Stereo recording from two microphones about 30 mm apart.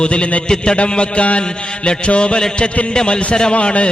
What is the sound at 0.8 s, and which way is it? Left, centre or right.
A man's voice, left.